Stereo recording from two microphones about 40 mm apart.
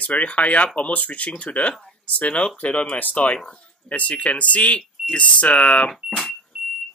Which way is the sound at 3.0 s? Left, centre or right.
Left.